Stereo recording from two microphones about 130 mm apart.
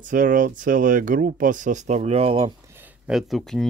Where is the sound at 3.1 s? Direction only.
Centre (ahead or behind).